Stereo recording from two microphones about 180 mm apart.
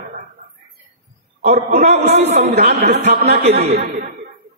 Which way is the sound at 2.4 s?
65° right (ahead or behind).